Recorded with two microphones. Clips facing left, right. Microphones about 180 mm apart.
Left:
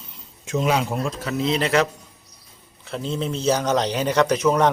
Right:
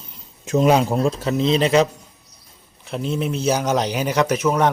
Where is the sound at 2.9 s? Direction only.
15° right (ahead or behind).